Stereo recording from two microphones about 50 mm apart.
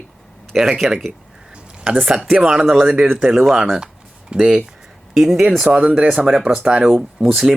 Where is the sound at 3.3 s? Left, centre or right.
Centre.